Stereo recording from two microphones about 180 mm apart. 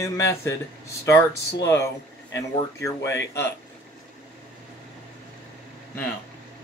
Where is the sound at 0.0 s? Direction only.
15° left (ahead or behind).